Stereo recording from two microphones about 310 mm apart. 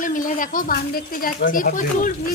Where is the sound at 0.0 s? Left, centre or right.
Left.